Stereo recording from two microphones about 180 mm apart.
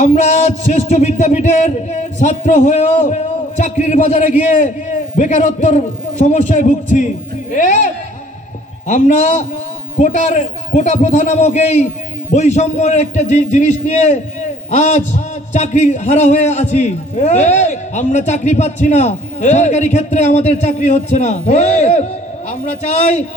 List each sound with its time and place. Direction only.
0.0 s a man's voice: 40° left (ahead or behind)
8.9 s a man's voice: 40° left (ahead or behind)